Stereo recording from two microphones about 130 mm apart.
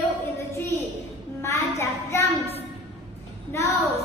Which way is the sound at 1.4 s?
20° left (ahead or behind).